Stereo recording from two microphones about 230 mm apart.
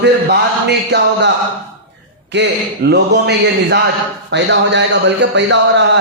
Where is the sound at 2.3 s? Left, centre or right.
Right.